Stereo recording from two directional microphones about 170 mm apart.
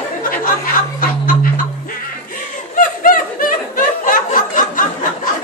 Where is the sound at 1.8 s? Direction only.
55° left (ahead or behind).